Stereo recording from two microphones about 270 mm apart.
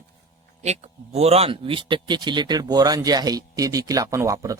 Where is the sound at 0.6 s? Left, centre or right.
Right.